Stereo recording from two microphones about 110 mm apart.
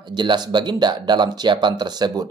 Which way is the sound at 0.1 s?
45° right (ahead or behind).